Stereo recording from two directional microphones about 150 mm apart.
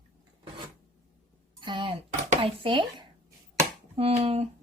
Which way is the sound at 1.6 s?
35° right (ahead or behind).